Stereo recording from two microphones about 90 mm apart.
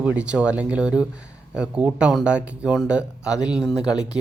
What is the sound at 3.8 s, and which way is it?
Speech, 45° left (ahead or behind).